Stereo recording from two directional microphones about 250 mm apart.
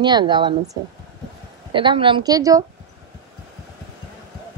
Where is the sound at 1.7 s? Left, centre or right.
Centre.